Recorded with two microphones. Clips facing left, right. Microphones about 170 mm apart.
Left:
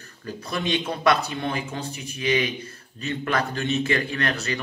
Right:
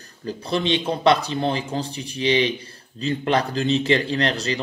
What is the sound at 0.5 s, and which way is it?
A man's voice, 30° right (ahead or behind).